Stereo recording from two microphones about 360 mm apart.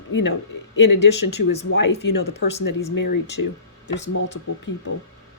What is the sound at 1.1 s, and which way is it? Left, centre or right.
Speech, left.